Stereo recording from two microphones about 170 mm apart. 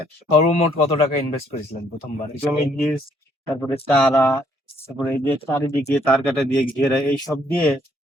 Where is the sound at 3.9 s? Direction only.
15° left (ahead or behind).